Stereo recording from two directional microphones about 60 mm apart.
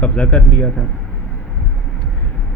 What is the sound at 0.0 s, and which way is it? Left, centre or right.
Speech, left.